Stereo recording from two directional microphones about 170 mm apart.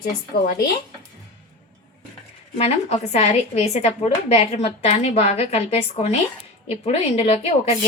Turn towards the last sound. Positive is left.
turn(degrees=35)  # may be behind; listen again after turning